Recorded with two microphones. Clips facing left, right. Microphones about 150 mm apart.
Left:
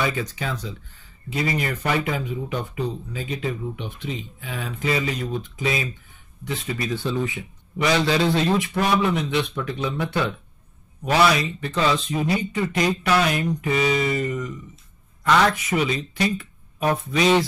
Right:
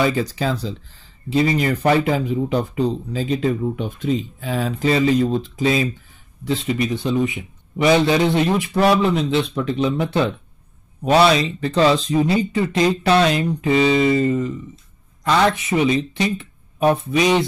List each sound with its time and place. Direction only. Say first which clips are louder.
0.0 s speech: right 6 dB; 35° right (ahead or behind); by 8.5 s 20° right (ahead or behind)
8.5 s speech: right 5 dB; 30° right (ahead or behind)